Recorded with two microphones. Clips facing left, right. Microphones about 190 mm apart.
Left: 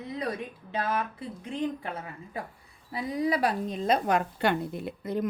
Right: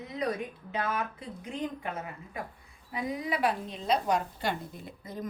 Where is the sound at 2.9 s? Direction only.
35° left (ahead or behind); by 5.3 s 70° left (ahead or behind).